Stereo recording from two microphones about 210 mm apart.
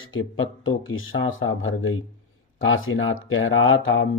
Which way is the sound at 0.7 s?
70° left (ahead or behind).